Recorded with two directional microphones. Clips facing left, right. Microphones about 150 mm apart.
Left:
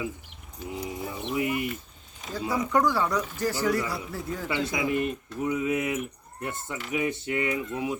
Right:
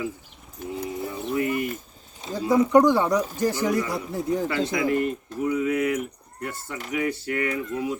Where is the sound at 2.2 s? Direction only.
25° right (ahead or behind).